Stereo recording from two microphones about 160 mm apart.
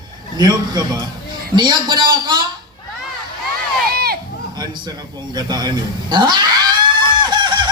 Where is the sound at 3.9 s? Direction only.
75° right (ahead or behind).